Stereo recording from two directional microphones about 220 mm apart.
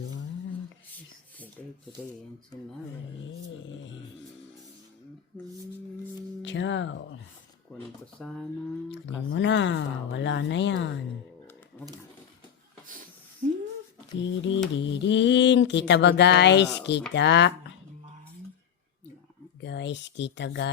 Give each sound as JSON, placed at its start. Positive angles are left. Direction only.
{"t": 3.7, "sound": "speech", "side_deg": 60}
{"t": 6.4, "sound": "speech", "side_deg": 55}
{"t": 8.2, "sound": "speech", "side_deg": 0}
{"t": 8.9, "sound": "speech", "side_deg": 55}
{"t": 13.4, "sound": "a sound", "side_deg": -35}
{"t": 14.2, "sound": "speech", "side_deg": 55}
{"t": 19.6, "sound": "speech", "side_deg": 55}